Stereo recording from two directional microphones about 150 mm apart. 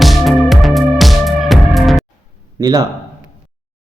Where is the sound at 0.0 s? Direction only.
Centre (ahead or behind).